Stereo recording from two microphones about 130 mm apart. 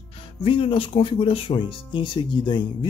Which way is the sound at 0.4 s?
40° left (ahead or behind).